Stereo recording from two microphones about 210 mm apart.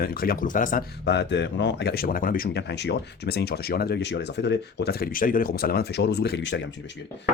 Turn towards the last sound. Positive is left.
turn(degrees=60)  # may be behind; listen again after turning